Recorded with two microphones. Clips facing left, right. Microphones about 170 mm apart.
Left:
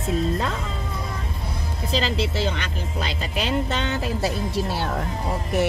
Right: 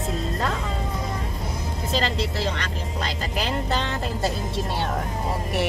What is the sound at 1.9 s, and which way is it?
Speech, centre (ahead or behind).